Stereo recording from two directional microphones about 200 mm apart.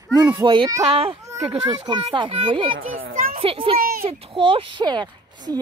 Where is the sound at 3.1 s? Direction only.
45° right (ahead or behind).